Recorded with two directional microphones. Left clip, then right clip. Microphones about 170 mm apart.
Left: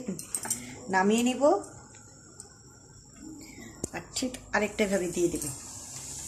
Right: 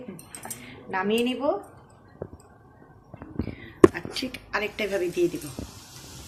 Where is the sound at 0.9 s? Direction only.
70° left (ahead or behind).